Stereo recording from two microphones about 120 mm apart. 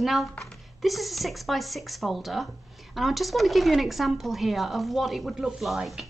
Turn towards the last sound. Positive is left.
turn(degrees=0)  # may be behind; listen again after turning